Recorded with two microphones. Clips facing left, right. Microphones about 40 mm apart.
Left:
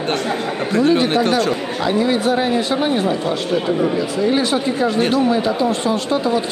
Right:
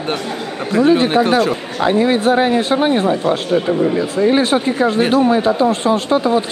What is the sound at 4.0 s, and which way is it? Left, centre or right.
Speech, right.